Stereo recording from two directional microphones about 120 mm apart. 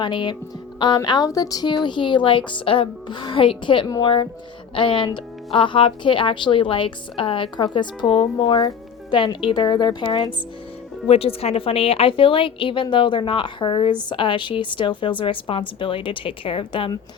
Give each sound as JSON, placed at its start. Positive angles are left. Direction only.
{"t": 0.0, "sound": "speech", "side_deg": 40}
{"t": 3.8, "sound": "speech", "side_deg": 30}
{"t": 4.7, "sound": "a woman's voice", "side_deg": 45}
{"t": 11.1, "sound": "a woman's voice", "side_deg": 55}